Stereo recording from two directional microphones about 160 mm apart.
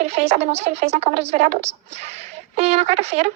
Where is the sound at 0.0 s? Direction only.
45° right (ahead or behind).